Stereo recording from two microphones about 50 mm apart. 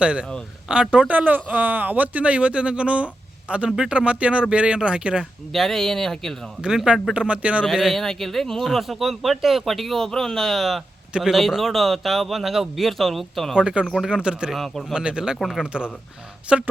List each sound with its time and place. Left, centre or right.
0.0 s speech: right
1.0 s speech: right; by 5.3 s centre
5.5 s a man's voice: centre
7.1 s speech: right
7.7 s speech: centre
13.6 s speech: centre
14.5 s speech: centre
14.9 s speech: centre
15.4 s speech: centre
15.6 s speech: centre